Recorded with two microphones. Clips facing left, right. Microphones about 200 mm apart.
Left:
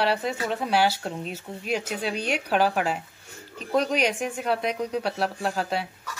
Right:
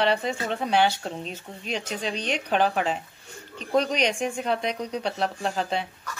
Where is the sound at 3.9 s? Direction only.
5° left (ahead or behind).